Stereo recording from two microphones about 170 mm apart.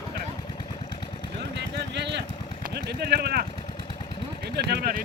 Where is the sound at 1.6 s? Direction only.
90° right.